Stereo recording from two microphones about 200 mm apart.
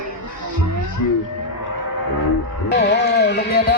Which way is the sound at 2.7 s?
55° left (ahead or behind).